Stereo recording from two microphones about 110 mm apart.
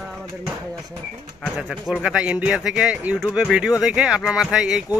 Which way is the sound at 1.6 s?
5° right (ahead or behind).